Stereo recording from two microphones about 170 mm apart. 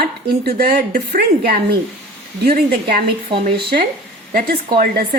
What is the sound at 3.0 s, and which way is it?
Speech, 65° right (ahead or behind).